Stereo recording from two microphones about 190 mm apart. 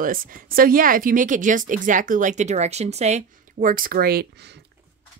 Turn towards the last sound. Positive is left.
turn(degrees=-55)  # may be behind; listen again after turning